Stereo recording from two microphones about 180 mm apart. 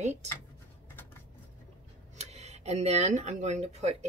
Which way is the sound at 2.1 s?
40° right (ahead or behind).